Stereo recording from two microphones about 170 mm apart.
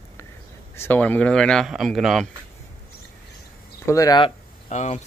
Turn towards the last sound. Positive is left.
turn(degrees=45)  # may be behind; listen again after turning